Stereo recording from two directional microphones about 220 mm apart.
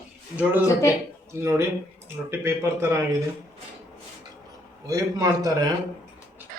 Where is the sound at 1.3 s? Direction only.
15° right (ahead or behind).